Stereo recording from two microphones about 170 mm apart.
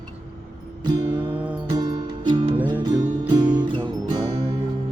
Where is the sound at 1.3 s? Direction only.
10° right (ahead or behind).